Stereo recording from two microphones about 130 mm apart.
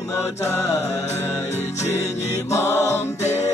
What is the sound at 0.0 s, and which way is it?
Music, 25° left (ahead or behind).